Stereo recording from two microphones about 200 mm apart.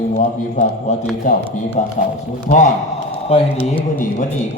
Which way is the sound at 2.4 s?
40° left (ahead or behind).